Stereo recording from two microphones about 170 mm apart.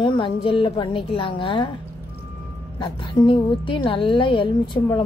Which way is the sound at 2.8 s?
30° left (ahead or behind).